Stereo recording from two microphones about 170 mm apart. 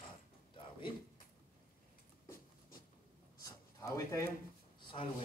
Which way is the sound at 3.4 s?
20° left (ahead or behind).